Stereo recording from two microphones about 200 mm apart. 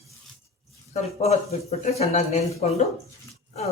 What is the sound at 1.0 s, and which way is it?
Speech, 30° left (ahead or behind).